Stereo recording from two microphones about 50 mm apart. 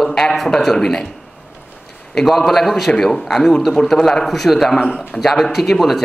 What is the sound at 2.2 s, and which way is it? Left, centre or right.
A man's voice, centre.